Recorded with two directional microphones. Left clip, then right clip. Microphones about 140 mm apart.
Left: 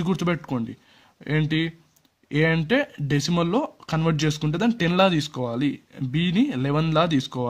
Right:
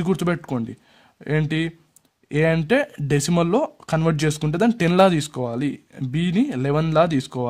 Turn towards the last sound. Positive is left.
turn(degrees=-30)  # may be behind; listen again after turning